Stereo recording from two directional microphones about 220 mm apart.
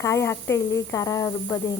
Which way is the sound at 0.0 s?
15° left (ahead or behind).